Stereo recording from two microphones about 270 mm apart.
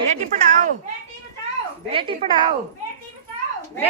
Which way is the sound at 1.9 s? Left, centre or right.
Centre.